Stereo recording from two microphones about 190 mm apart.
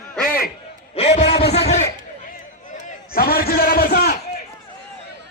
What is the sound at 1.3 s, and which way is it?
Speech, 60° left (ahead or behind).